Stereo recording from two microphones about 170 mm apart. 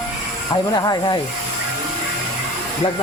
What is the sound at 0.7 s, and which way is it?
Speech, 25° left (ahead or behind).